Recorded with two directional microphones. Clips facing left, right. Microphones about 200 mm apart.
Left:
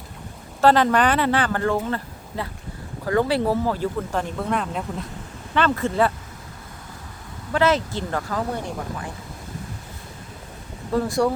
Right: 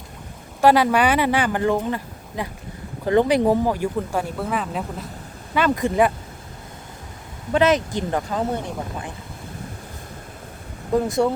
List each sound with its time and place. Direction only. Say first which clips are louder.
0.6 s speech: right 1 dB; 10° right (ahead or behind)
5.5 s speech: right 2 dB; 15° right (ahead or behind)
7.5 s speech: right 2 dB; 20° right (ahead or behind)
10.9 s speech: right 2 dB; 20° right (ahead or behind)